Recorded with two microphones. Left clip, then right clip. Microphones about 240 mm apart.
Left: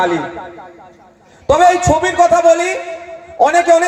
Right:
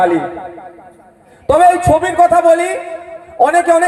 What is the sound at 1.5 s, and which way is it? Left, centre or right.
A man's voice, right.